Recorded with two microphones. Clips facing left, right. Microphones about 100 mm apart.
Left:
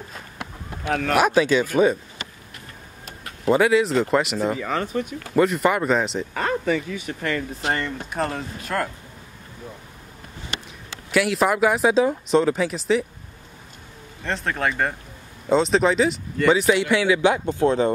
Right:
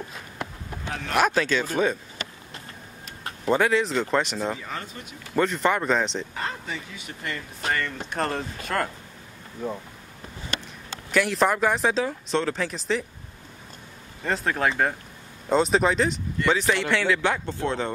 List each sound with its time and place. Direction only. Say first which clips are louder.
0.8 s speech: left 10 dB; 70° left (ahead or behind)
1.1 s speech: left 4 dB; 10° left (ahead or behind)
3.4 s speech: left 4 dB; 5° left (ahead or behind)
4.6 s speech: left 11 dB; 80° left
5.3 s speech: left 4 dB; 5° left (ahead or behind)
6.3 s speech: left 9 dB; 70° left (ahead or behind)
7.6 s speech: left 1 dB; 25° left (ahead or behind)
8.1 s speech: even; centre (ahead or behind)
11.1 s speech: left 2 dB; 5° left (ahead or behind)
12.0 s speech: left 7 dB; 20° left (ahead or behind); by 13.0 s centre (ahead or behind)
14.2 s speech: even; centre (ahead or behind); by 17.9 s 15° left (ahead or behind)